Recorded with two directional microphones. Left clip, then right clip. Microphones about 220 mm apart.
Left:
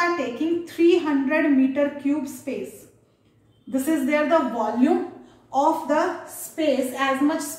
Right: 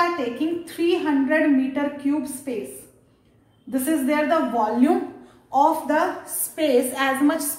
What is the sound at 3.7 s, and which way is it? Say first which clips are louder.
A woman's voice: even; 25° right (ahead or behind).